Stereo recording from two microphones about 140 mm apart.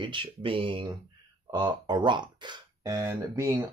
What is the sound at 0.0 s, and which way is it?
Speech, 35° right (ahead or behind).